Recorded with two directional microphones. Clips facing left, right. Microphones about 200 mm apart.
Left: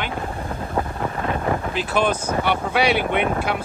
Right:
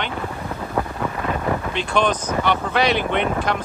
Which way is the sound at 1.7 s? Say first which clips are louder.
Right 2 dB; 5° left (ahead or behind).